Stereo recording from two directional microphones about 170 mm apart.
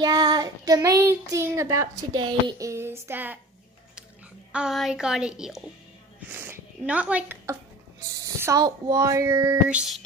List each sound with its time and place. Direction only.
0.0 s child singing: 25° right (ahead or behind)
2.7 s a sound: 15° right (ahead or behind)
4.5 s a woman's voice: 5° right (ahead or behind)
8.0 s child singing: 20° right (ahead or behind)
9.7 s a woman's voice: 5° right (ahead or behind)